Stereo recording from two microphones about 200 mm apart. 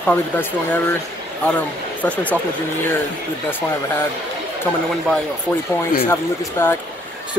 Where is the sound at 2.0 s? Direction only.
5° left (ahead or behind).